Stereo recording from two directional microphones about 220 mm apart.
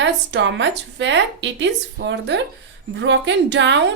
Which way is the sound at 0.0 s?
55° right (ahead or behind).